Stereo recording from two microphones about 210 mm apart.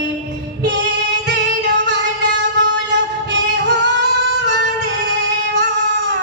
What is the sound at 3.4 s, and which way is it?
Music, 55° right (ahead or behind).